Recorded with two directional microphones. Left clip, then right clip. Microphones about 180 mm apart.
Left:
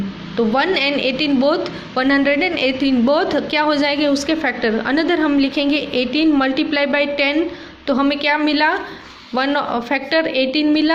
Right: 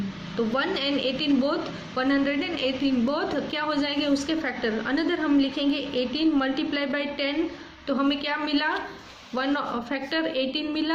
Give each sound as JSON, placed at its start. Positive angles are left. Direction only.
{"t": 0.5, "sound": "a woman's voice", "side_deg": 40}